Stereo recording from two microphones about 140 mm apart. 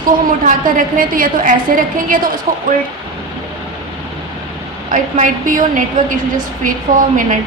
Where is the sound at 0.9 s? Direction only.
80° right.